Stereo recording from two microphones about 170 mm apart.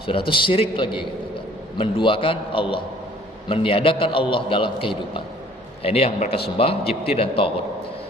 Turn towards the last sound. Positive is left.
turn(degrees=35)  # may be behind; listen again after turning